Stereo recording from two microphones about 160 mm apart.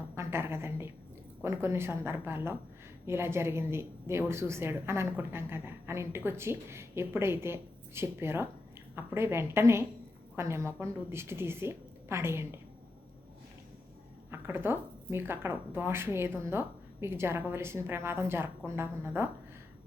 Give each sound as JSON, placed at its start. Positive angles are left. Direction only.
{"t": 0.2, "sound": "a sound", "side_deg": -15}
{"t": 1.4, "sound": "a woman's voice", "side_deg": -15}
{"t": 14.3, "sound": "a woman's voice", "side_deg": -15}